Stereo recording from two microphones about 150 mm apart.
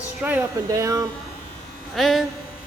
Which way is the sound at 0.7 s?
20° right (ahead or behind).